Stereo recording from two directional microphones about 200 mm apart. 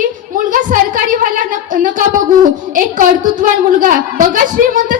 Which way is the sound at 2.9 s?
40° right (ahead or behind).